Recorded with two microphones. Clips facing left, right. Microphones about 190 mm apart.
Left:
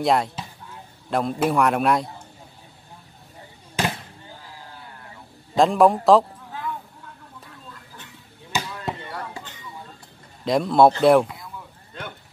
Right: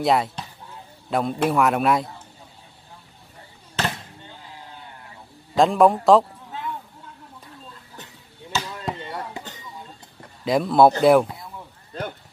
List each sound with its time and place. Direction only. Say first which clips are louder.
0.0 s a man's voice: even; centre (ahead or behind)
3.8 s basketball bounce: left 2 dB; 15° left (ahead or behind)
4.4 s a sound: right 1 dB; 20° right (ahead or behind)
5.6 s a man's voice: even; centre (ahead or behind)
8.5 s chop: even; 15° left (ahead or behind)
9.0 s a sound: right 2 dB; 20° right (ahead or behind)
10.4 s a man's voice: even; centre (ahead or behind)